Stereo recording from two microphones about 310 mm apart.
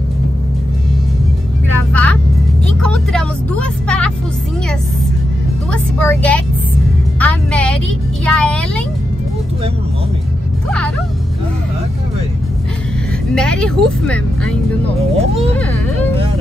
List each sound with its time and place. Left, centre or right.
1.9 s music: centre
2.6 s vehicle: centre
5.7 s music: centre
8.3 s a sound: centre
13.3 s speech: centre
15.1 s speech: centre